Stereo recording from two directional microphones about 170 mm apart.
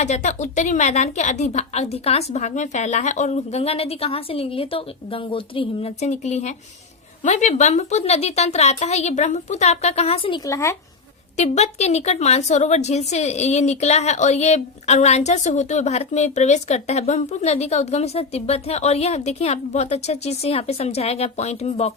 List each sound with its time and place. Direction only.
0.0 s a woman's voice: 45° left (ahead or behind)
10.4 s speech: 15° left (ahead or behind)
11.3 s a woman's voice: 40° left (ahead or behind)